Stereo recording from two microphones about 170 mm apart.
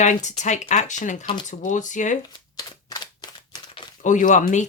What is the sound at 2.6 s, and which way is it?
Typewriter, 25° left (ahead or behind).